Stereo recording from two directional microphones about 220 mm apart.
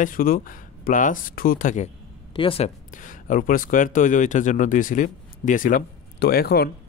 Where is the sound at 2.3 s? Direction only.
25° left (ahead or behind).